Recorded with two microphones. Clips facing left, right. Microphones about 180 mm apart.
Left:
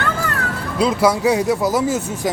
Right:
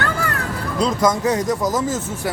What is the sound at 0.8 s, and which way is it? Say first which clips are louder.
Speech: left 2 dB; 10° left (ahead or behind).